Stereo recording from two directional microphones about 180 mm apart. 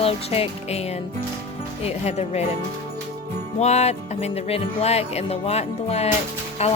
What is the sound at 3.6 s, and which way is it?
Speech, 40° left (ahead or behind).